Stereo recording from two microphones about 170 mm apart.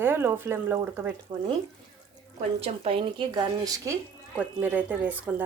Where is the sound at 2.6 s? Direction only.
35° right (ahead or behind).